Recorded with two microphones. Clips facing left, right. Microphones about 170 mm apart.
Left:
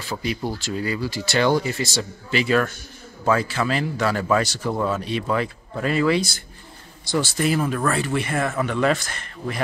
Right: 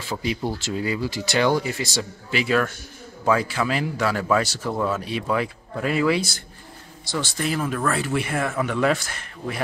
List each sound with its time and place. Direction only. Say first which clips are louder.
0.1 s speech: even; 20° right (ahead or behind); by 5.0 s 5° left (ahead or behind)
5.0 s speech: left 1 dB; 5° right (ahead or behind)
7.1 s speech: left 4 dB; 5° left (ahead or behind)